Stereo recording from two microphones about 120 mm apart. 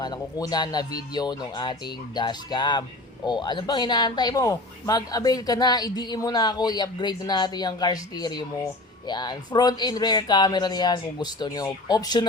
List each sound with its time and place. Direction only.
0.0 s speech: 35° left (ahead or behind)